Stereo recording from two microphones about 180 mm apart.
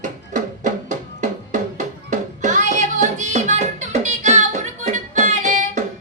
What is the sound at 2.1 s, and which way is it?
Music, 45° right (ahead or behind).